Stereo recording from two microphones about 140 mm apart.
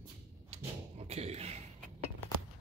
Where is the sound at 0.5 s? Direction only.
50° right (ahead or behind).